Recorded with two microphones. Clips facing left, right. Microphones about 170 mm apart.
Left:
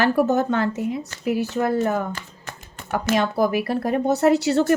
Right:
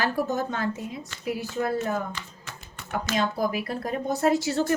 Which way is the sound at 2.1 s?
50° left (ahead or behind).